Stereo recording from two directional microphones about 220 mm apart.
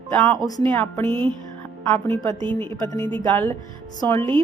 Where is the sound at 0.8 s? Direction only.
10° left (ahead or behind).